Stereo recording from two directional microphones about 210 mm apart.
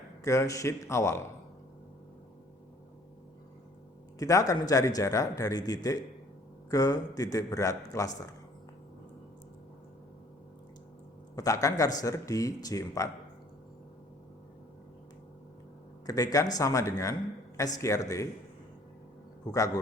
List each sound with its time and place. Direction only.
0.3 s a man's voice: 15° left (ahead or behind)
4.2 s a man's voice: 15° left (ahead or behind)
11.3 s a man's voice: 15° left (ahead or behind)
16.0 s a man's voice: 15° left (ahead or behind)
19.5 s a man's voice: 15° left (ahead or behind)